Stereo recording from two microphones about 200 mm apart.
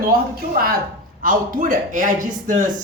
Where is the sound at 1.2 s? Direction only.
40° right (ahead or behind).